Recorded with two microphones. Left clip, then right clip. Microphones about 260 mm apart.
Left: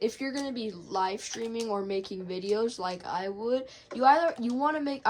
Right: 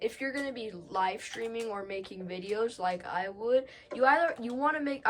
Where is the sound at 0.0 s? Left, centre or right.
Centre.